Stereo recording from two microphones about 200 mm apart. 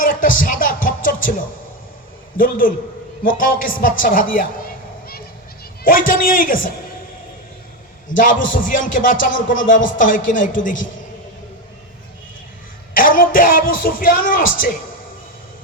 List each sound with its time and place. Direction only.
0.0 s music: 45° left (ahead or behind)
2.4 s a woman's voice: 45° left (ahead or behind)
5.8 s a woman's voice: 45° left (ahead or behind)
8.1 s speech: 40° left (ahead or behind)
12.9 s a woman's voice: 45° left (ahead or behind)